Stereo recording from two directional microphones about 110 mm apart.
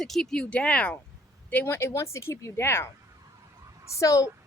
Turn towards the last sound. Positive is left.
turn(degrees=30)  # may be behind; listen again after turning